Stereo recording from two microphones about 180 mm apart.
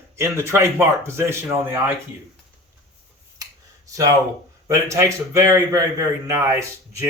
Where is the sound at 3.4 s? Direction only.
20° right (ahead or behind).